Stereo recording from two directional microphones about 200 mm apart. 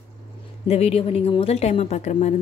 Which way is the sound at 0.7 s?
30° left (ahead or behind).